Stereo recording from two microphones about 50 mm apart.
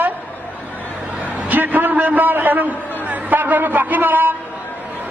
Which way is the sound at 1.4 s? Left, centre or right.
Right.